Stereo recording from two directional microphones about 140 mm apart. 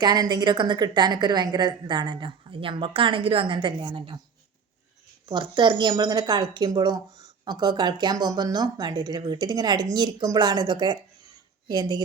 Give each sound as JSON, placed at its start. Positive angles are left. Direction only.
{"t": 0.0, "sound": "a woman's voice", "side_deg": -30}
{"t": 5.3, "sound": "a woman's voice", "side_deg": -35}